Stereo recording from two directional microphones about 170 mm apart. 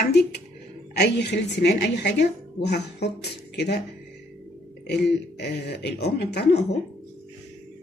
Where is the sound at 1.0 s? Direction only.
85° left.